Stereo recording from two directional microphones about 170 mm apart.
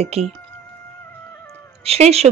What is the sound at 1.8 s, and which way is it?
Speech, 35° right (ahead or behind).